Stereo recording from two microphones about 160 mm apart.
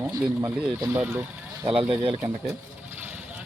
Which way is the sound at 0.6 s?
10° right (ahead or behind).